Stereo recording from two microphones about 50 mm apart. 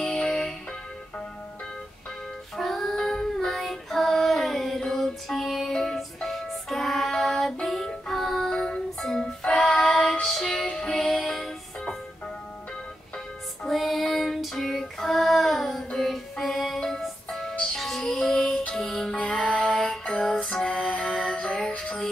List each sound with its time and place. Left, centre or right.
0.1 s music: centre
2.5 s child singing: centre
5.7 s music: centre
13.7 s child singing: centre
16.0 s music: centre
19.2 s music: left
19.7 s music: centre